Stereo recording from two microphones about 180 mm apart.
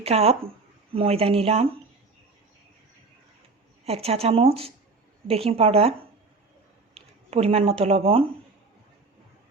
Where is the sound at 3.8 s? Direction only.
35° right (ahead or behind).